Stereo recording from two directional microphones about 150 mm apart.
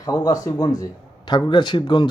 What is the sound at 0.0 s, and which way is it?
Speech, 25° left (ahead or behind).